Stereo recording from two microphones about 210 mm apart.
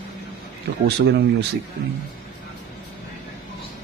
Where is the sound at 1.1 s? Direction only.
55° right (ahead or behind).